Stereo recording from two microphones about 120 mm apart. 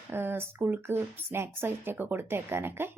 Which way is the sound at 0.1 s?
20° right (ahead or behind).